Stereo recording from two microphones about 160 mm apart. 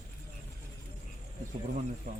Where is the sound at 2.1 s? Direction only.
90° right.